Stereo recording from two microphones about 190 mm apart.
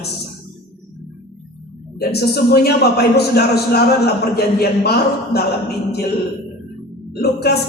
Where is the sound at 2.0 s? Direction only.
55° left (ahead or behind).